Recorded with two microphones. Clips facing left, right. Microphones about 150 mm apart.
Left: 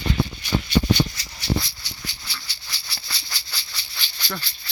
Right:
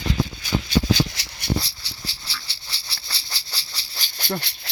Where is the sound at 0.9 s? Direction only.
90° right.